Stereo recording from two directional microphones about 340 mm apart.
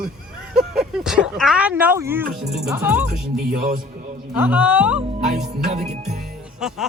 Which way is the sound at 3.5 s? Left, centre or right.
Right.